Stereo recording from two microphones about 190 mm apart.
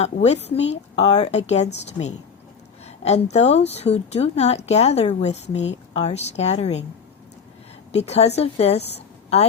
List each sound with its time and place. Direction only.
0.0 s speech: 35° left (ahead or behind)
2.8 s a sound: 35° left (ahead or behind)
3.3 s speech: 35° left (ahead or behind)
7.9 s speech: 35° left (ahead or behind)